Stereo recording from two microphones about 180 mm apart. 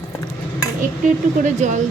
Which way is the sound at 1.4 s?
40° right (ahead or behind).